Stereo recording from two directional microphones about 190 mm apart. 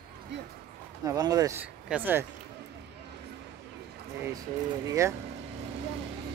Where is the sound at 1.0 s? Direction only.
20° right (ahead or behind).